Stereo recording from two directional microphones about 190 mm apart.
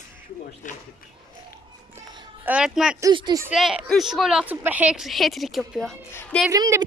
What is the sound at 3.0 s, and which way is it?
Speech, 25° right (ahead or behind).